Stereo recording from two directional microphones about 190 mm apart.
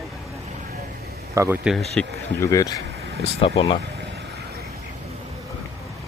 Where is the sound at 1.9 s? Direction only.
15° left (ahead or behind).